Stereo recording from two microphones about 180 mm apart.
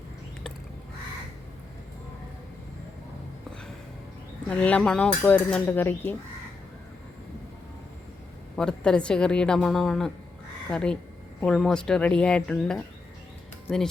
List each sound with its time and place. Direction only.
4.4 s a woman's voice: 5° left (ahead or behind)
8.5 s a woman's voice: 5° left (ahead or behind)